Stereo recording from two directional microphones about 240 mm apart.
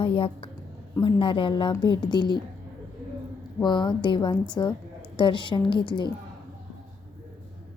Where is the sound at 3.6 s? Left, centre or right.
Centre.